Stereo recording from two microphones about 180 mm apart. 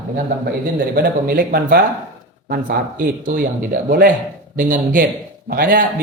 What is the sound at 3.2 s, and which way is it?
Speech, 50° right (ahead or behind).